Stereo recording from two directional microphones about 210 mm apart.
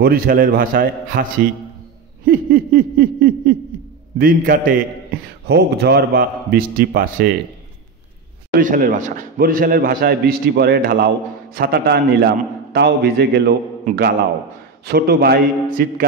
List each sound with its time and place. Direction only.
0.0 s a man's voice: 45° right (ahead or behind)
2.2 s a man's voice: 45° right (ahead or behind)
8.5 s a man's voice: 40° right (ahead or behind)